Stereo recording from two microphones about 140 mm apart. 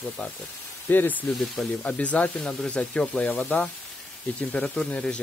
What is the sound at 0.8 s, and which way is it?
Speech, 15° left (ahead or behind).